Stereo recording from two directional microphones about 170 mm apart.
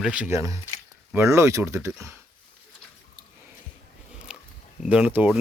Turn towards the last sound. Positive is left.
turn(degrees=-10)  # may be behind; listen again after turning